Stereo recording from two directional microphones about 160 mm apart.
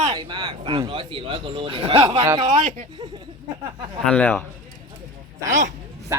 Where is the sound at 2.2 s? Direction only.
25° right (ahead or behind).